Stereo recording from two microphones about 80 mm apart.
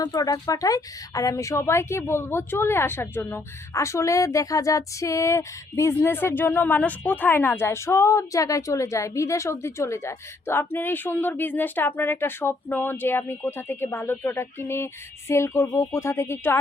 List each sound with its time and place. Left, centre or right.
0.0 s speech: left
3.8 s speech: left